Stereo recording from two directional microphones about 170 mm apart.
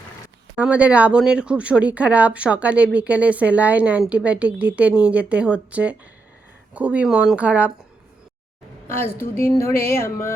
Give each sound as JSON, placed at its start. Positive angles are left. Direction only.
{"t": 0.5, "sound": "speech", "side_deg": -10}
{"t": 8.9, "sound": "a woman's voice", "side_deg": 15}
{"t": 9.6, "sound": "music", "side_deg": 15}